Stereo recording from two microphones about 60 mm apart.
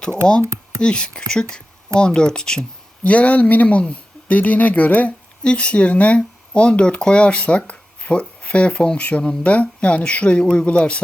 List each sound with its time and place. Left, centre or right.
0.4 s a sound: right
0.8 s speech: centre
3.0 s speech: left